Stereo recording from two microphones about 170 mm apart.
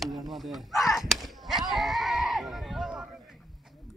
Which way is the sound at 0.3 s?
Centre (ahead or behind).